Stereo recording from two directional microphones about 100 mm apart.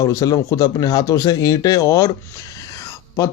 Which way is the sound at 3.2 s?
30° left (ahead or behind).